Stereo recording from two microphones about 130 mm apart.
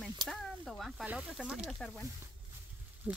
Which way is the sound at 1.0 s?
10° right (ahead or behind).